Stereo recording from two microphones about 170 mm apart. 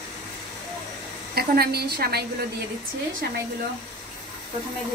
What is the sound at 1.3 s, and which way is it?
Speech, 65° right (ahead or behind).